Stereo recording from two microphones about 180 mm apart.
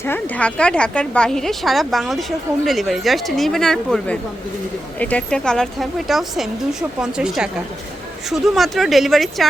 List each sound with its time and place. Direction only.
0.0 s speech: 10° left (ahead or behind)